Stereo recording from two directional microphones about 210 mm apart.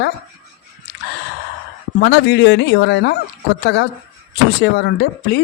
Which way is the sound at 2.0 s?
50° left (ahead or behind).